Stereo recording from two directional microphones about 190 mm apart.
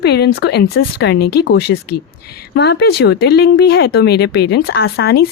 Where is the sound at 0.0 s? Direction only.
60° left (ahead or behind).